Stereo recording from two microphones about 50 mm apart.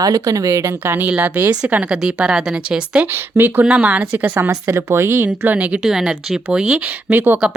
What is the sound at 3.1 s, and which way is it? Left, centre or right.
Speech, right.